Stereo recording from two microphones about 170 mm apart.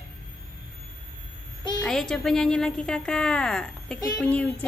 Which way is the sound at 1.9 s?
5° left (ahead or behind).